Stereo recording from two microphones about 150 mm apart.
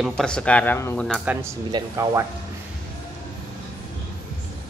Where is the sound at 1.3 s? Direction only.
10° right (ahead or behind).